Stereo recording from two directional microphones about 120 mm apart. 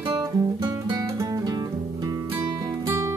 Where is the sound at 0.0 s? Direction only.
35° right (ahead or behind).